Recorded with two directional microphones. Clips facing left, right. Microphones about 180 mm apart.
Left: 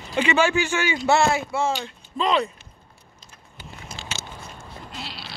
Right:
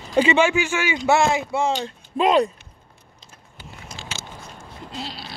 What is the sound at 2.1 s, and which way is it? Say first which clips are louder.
Speech: right 5 dB; 45° right (ahead or behind).